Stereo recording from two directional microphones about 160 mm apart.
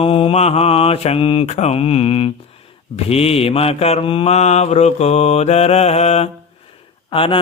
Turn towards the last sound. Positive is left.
turn(degrees=35)  # may be behind; listen again after turning